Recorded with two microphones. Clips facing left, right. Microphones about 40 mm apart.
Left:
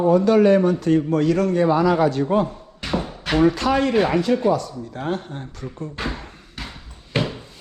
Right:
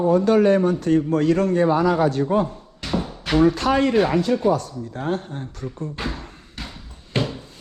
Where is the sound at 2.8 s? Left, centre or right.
Centre.